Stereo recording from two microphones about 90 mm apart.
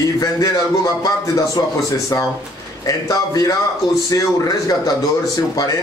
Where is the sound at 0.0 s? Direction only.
40° left (ahead or behind).